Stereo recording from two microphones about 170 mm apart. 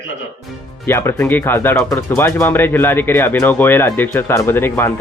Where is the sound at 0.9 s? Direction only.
15° left (ahead or behind).